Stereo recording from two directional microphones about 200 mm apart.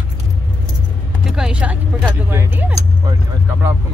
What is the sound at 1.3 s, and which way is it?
Speech, 5° right (ahead or behind).